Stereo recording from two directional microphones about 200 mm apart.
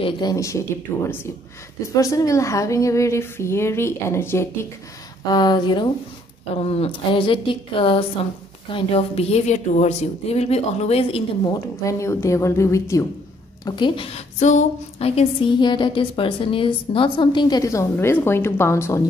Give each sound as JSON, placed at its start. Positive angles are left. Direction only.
{"t": 0.0, "sound": "a woman's voice", "side_deg": 20}
{"t": 2.0, "sound": "a woman's voice", "side_deg": 15}
{"t": 11.8, "sound": "a woman's voice", "side_deg": 15}